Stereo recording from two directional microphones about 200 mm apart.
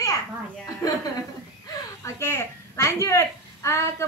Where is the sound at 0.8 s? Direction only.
15° left (ahead or behind).